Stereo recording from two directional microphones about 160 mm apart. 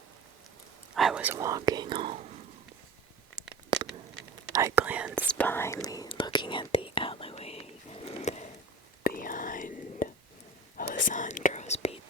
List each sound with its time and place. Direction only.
0.9 s speech: 5° right (ahead or behind); by 2.1 s 30° right (ahead or behind)
3.7 s a sound: 30° right (ahead or behind)
4.5 s whispering: 15° right (ahead or behind)
5.3 s whispering: 10° left (ahead or behind); by 8.4 s 45° left (ahead or behind)
9.0 s whispering: 60° left (ahead or behind); by 11.9 s 45° left (ahead or behind)